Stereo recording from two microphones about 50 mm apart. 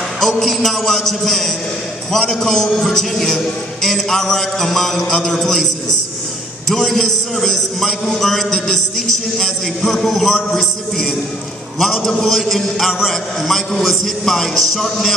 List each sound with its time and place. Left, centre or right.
0.2 s a man's voice: centre